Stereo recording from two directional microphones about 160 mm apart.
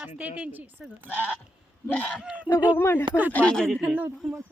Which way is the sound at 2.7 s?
15° left (ahead or behind).